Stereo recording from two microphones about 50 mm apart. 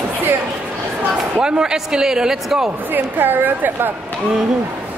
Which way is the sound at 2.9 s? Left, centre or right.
Right.